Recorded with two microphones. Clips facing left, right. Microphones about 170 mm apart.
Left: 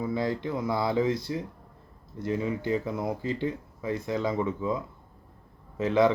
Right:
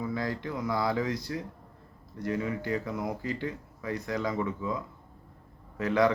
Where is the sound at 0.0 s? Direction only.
25° left (ahead or behind).